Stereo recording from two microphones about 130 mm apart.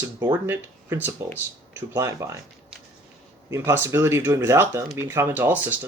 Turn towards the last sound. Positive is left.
turn(degrees=-15)  # may be behind; listen again after turning